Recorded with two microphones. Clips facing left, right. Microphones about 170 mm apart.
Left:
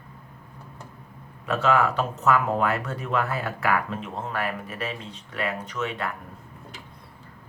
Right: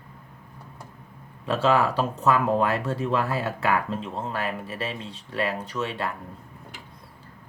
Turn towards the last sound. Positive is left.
turn(degrees=-30)  # may be behind; listen again after turning